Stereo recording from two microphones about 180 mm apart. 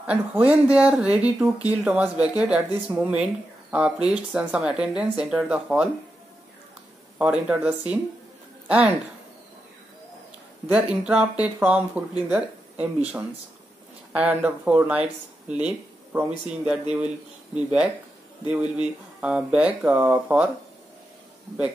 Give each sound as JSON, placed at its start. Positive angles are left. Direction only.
{"t": 0.0, "sound": "speech", "side_deg": -5}
{"t": 7.2, "sound": "speech", "side_deg": -5}
{"t": 10.7, "sound": "speech", "side_deg": -5}
{"t": 18.5, "sound": "speech", "side_deg": -5}